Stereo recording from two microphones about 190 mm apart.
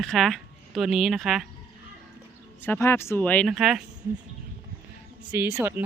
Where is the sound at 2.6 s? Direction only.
10° left (ahead or behind).